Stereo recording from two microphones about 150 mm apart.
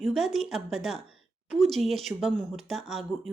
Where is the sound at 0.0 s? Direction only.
Centre (ahead or behind).